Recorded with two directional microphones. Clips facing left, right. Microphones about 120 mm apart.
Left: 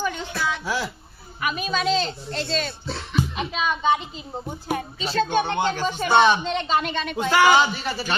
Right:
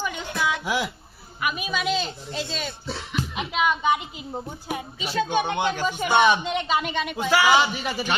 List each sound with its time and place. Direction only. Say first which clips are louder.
0.3 s music: right 4 dB; 15° right (ahead or behind)
1.4 s speech: left 2 dB; 10° right (ahead or behind)